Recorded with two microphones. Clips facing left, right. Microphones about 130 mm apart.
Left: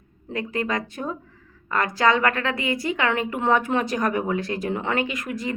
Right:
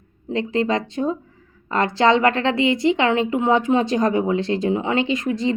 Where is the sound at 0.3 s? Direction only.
25° right (ahead or behind).